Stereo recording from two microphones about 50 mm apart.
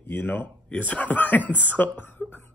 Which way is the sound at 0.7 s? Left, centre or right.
Left.